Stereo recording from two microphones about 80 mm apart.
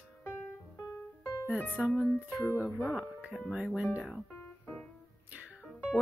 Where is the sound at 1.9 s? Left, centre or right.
Left.